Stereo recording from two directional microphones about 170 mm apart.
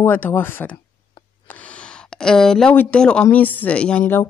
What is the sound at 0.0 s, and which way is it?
Speech, 10° left (ahead or behind).